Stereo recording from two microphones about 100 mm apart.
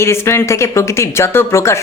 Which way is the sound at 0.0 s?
25° left (ahead or behind).